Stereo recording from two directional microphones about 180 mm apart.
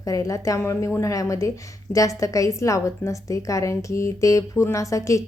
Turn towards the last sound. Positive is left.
turn(degrees=15)  # may be behind; listen again after turning